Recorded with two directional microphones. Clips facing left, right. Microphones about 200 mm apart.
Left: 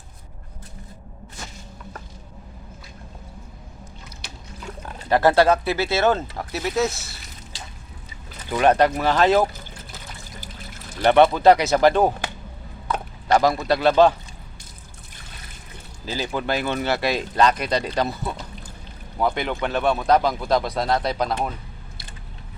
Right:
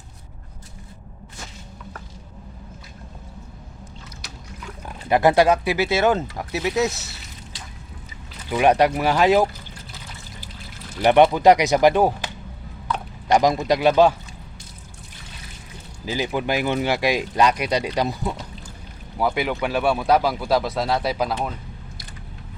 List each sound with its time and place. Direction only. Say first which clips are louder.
5.0 s speech: even; 15° right (ahead or behind)
8.4 s speech: even; 10° right (ahead or behind)
11.0 s speech: even; 15° right (ahead or behind)
13.3 s speech: right 1 dB; 15° right (ahead or behind)
16.0 s speech: right 2 dB; 15° right (ahead or behind)